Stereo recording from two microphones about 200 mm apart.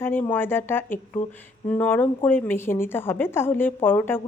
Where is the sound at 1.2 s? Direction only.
40° left (ahead or behind).